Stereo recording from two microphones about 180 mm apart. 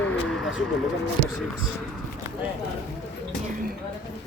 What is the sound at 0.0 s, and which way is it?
Vehicle, 5° left (ahead or behind).